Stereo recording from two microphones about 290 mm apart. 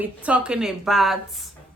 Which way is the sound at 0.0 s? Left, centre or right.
Centre.